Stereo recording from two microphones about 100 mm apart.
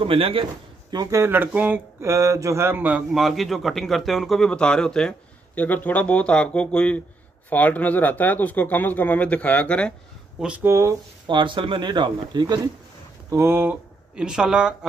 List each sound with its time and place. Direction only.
0.0 s a man's voice: 70° right (ahead or behind)
1.2 s speech: 20° right (ahead or behind)
2.0 s speech: 30° right (ahead or behind)
3.1 s a man's voice: centre (ahead or behind)
10.6 s speech: 30° right (ahead or behind)
11.2 s speech: 55° right (ahead or behind)
13.3 s speech: 25° right (ahead or behind)
14.1 s speech: 10° right (ahead or behind)